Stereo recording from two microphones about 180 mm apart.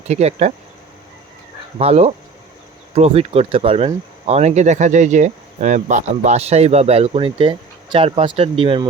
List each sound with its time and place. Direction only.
0.1 s speech: 40° right (ahead or behind)
1.8 s speech: 35° right (ahead or behind)